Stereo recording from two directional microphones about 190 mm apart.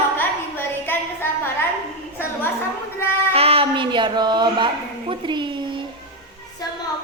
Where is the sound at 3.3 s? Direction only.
30° right (ahead or behind).